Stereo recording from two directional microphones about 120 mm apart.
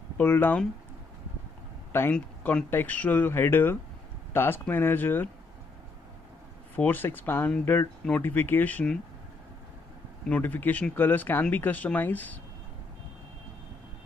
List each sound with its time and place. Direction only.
0.2 s speech: 15° left (ahead or behind)
1.9 s speech: 20° left (ahead or behind)
6.7 s speech: 15° left (ahead or behind)
10.2 s speech: 15° left (ahead or behind)